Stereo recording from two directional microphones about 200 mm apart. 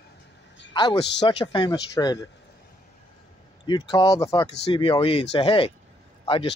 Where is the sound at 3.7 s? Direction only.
20° left (ahead or behind).